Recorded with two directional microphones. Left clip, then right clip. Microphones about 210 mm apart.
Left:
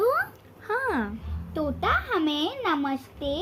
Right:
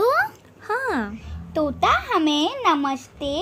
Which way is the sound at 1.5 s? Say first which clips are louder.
Right 6 dB; 50° right (ahead or behind).